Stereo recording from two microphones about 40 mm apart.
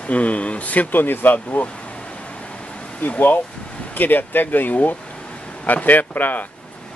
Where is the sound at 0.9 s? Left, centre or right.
Left.